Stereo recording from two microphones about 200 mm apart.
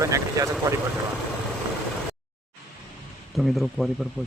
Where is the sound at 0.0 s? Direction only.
15° right (ahead or behind).